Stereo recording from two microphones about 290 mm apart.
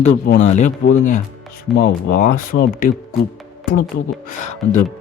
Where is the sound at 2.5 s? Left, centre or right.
Left.